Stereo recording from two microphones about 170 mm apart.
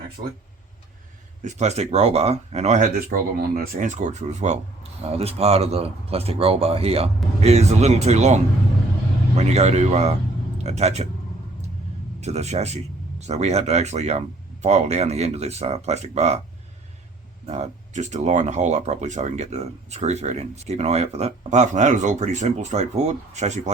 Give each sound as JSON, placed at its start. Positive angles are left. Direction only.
{"t": 1.4, "sound": "speech", "side_deg": -45}
{"t": 12.2, "sound": "speech", "side_deg": -40}
{"t": 17.4, "sound": "speech", "side_deg": -40}